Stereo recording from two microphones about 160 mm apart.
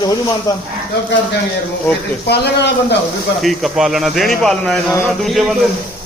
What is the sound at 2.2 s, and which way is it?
Speech, 90° left.